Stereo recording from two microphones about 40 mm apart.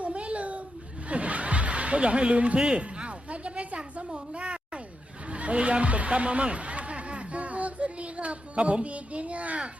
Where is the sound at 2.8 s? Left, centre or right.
Right.